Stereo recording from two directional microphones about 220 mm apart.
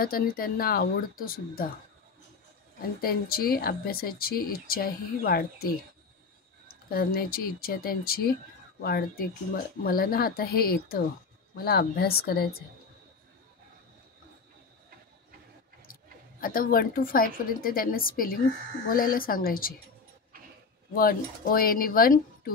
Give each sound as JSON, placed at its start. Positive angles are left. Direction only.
{"t": 0.0, "sound": "speech", "side_deg": 40}
{"t": 2.8, "sound": "speech", "side_deg": 40}
{"t": 6.9, "sound": "speech", "side_deg": 45}
{"t": 15.9, "sound": "speech", "side_deg": 40}
{"t": 20.9, "sound": "speech", "side_deg": 40}